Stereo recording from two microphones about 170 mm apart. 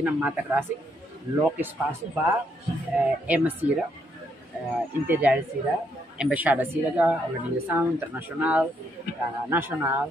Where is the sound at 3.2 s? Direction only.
10° right (ahead or behind).